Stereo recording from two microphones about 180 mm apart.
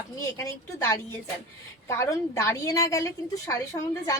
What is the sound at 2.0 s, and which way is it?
A woman's voice, 15° left (ahead or behind).